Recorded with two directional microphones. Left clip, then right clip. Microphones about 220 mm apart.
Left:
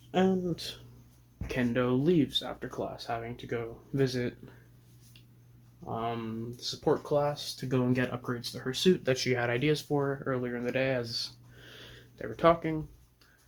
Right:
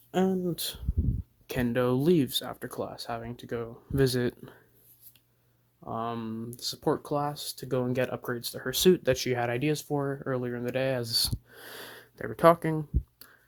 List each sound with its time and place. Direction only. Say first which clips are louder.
0.1 s speech: even; 55° right (ahead or behind)
5.8 s speech: right 1 dB; 50° right (ahead or behind)